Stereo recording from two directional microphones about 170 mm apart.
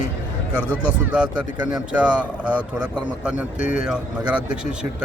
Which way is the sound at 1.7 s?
5° right (ahead or behind).